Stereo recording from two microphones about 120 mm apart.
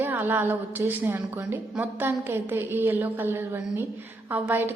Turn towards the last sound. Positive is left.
turn(degrees=-15)  # may be behind; listen again after turning